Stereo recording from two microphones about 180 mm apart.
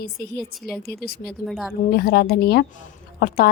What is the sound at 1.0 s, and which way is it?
Speech, 60° left (ahead or behind).